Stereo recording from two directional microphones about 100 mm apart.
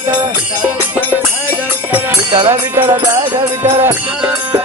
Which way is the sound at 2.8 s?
55° right (ahead or behind).